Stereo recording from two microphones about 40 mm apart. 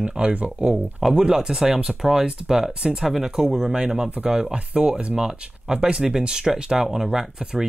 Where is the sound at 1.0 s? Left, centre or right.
Centre.